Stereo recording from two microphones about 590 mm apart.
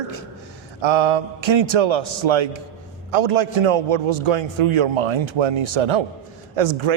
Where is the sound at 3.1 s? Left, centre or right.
Right.